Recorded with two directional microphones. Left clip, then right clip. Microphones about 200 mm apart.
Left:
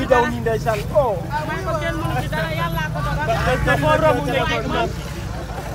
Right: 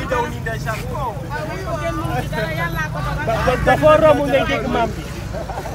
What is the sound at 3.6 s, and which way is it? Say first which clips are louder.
Speech: right 6 dB; 35° right (ahead or behind).